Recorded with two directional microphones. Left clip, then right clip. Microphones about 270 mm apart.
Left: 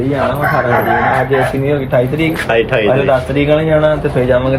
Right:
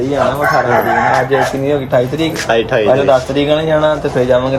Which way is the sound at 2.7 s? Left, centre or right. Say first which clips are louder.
Right 4 dB; right.